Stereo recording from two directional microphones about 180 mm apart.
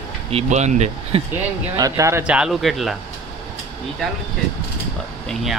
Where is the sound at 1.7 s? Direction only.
20° right (ahead or behind); by 2.9 s centre (ahead or behind).